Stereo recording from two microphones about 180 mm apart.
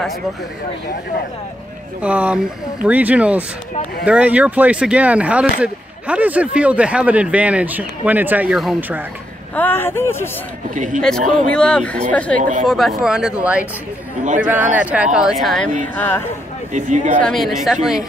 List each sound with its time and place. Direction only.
2.0 s speech: 5° right (ahead or behind)
9.6 s speech: 10° left (ahead or behind)
10.7 s speech: 45° right (ahead or behind)
11.0 s speech: 5° left (ahead or behind)
12.4 s speech: 45° right (ahead or behind)
12.6 s speech: centre (ahead or behind)
16.7 s speech: 45° right (ahead or behind)
17.2 s speech: centre (ahead or behind)